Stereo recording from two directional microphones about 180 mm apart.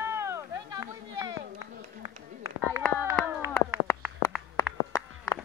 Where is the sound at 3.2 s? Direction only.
15° right (ahead or behind).